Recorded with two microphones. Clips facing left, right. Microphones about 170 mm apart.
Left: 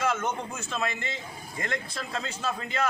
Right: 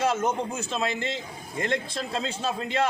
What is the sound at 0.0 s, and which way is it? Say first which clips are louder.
A man's voice: right 4 dB; 30° right (ahead or behind).